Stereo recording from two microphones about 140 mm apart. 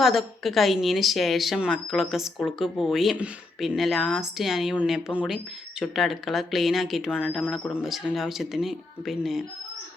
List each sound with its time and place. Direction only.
0.0 s a woman's voice: centre (ahead or behind)
7.6 s speech: 15° left (ahead or behind)
7.9 s a woman's voice: centre (ahead or behind)